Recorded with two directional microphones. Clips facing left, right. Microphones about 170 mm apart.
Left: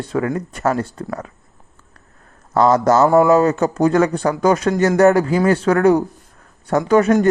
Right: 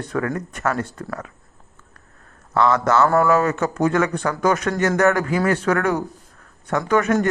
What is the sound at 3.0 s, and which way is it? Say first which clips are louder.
Speech: left 7 dB; 15° left (ahead or behind).